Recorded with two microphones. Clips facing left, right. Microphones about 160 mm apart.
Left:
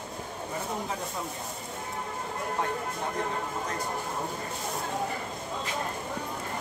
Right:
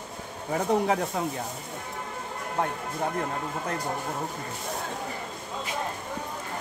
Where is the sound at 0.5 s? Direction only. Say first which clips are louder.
Right 11 dB; 75° right (ahead or behind).